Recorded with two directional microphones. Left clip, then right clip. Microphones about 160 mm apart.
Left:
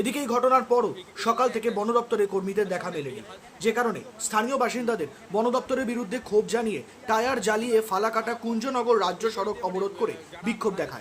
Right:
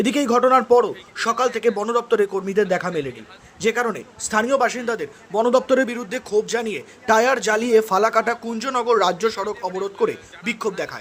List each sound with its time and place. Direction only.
0.0 s a man's voice: 35° right (ahead or behind)